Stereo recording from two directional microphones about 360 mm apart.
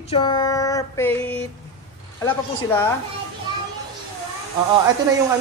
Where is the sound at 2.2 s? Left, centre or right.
Centre.